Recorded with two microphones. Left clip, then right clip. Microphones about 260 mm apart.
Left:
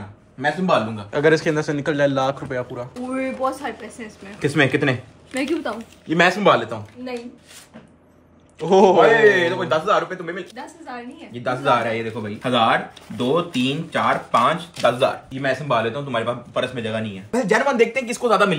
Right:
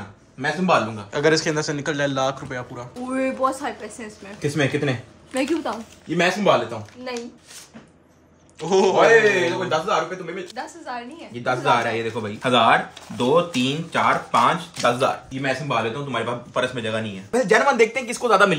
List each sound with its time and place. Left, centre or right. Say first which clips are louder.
0.4 s speech: left 1 dB; centre
4.4 s speech: left 4 dB; centre
5.3 s speech: even; centre
6.0 s speech: left 3 dB; centre
8.6 s speech: left 3 dB; centre
10.6 s speech: right 3 dB; centre
11.4 s speech: even; centre